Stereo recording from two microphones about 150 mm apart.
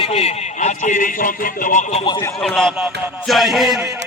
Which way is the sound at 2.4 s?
5° left (ahead or behind).